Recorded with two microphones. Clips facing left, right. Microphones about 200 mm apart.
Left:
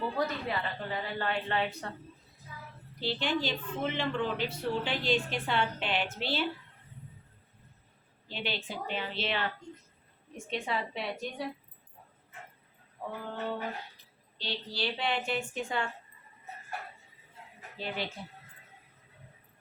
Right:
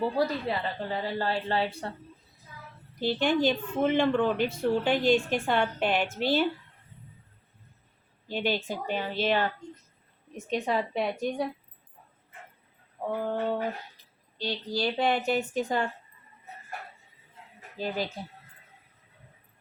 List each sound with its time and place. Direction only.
0.2 s a woman's voice: 35° right (ahead or behind)
3.0 s a woman's voice: 50° right (ahead or behind)
8.3 s a woman's voice: 45° right (ahead or behind)
13.0 s mantra: 50° right (ahead or behind)
14.3 s a woman's voice: 45° right (ahead or behind)
17.7 s a woman's voice: 40° right (ahead or behind)